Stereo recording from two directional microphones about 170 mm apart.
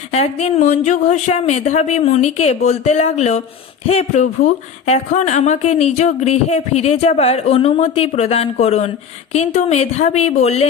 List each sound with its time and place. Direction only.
0.1 s speech: 40° left (ahead or behind)